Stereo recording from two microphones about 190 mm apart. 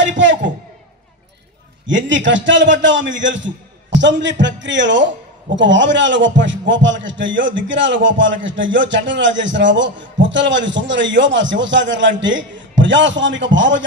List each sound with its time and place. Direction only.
0.2 s speech: 75° right (ahead or behind)
1.9 s speech: 75° right (ahead or behind)